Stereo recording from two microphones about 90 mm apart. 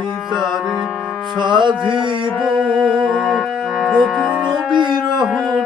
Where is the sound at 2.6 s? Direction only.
15° right (ahead or behind).